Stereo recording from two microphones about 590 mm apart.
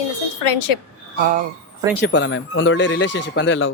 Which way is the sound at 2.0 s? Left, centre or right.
Centre.